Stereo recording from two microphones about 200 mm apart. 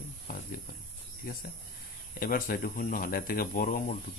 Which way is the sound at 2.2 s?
45° left (ahead or behind).